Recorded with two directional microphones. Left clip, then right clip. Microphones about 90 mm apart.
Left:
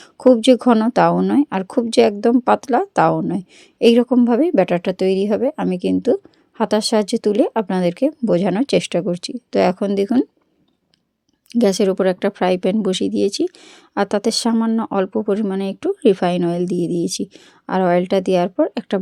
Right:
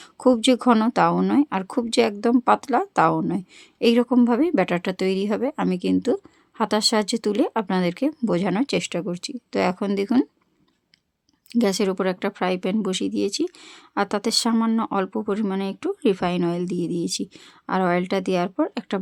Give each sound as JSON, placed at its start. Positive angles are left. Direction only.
{"t": 0.0, "sound": "a woman's voice", "side_deg": 20}
{"t": 8.6, "sound": "speech", "side_deg": 40}
{"t": 11.4, "sound": "speech", "side_deg": 25}
{"t": 14.5, "sound": "speech", "side_deg": 10}